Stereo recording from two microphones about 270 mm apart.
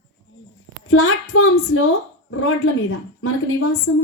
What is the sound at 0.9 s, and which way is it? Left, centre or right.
Female singing, left.